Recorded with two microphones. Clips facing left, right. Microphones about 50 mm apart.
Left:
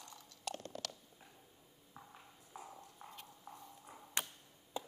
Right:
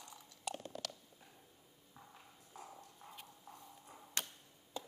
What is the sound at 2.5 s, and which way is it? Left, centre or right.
Clip-clop, centre.